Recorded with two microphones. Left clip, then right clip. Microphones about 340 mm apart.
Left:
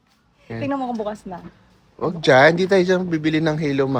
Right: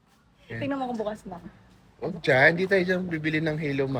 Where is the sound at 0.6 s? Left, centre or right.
Left.